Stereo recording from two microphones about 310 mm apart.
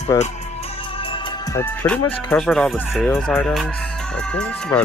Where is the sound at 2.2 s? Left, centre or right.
Centre.